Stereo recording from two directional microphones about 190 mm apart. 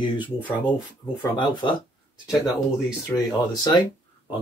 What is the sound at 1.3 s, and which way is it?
Speech, 25° left (ahead or behind).